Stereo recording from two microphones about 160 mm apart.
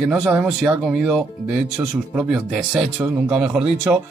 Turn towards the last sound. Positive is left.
turn(degrees=-5)  # may be behind; listen again after turning